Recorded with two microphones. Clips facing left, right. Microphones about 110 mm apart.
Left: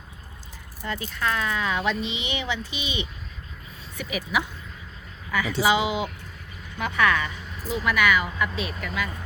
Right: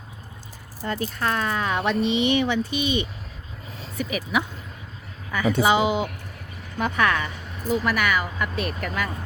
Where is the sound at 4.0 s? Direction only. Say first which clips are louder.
Right 3 dB; 40° right (ahead or behind).